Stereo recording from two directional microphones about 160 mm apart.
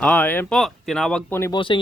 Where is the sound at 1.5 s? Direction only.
30° left (ahead or behind).